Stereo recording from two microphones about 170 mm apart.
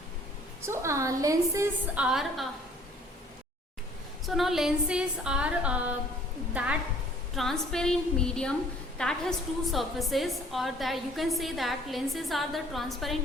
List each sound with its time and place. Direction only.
0.6 s a woman's voice: 15° right (ahead or behind)
2.0 s a woman's voice: 5° right (ahead or behind)
4.3 s a woman's voice: centre (ahead or behind)